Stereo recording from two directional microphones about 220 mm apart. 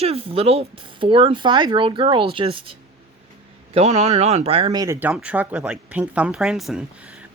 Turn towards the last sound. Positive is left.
turn(degrees=0)  # may be behind; listen again after turning